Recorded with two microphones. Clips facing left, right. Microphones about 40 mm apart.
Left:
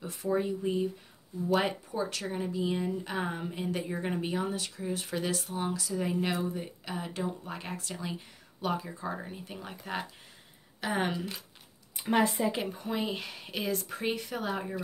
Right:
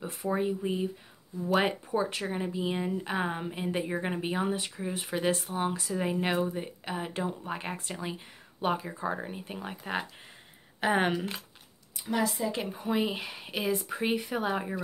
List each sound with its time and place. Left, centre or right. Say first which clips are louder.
0.0 s speech: even; right
10.8 s speech: right 4 dB; right
12.0 s speech: left 3 dB; left
12.7 s speech: right 3 dB; centre